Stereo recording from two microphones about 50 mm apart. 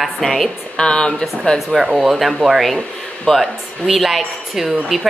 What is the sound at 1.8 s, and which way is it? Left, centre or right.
Speech, centre.